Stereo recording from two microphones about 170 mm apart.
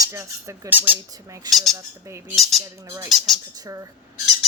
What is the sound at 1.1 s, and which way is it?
Speech, 20° right (ahead or behind).